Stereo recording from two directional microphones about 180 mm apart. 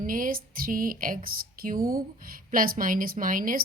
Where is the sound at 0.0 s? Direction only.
50° right (ahead or behind).